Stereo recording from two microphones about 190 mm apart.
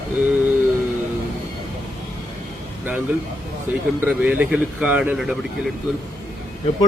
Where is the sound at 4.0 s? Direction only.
10° right (ahead or behind).